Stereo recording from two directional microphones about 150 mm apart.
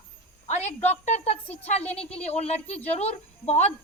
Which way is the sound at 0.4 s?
50° left (ahead or behind).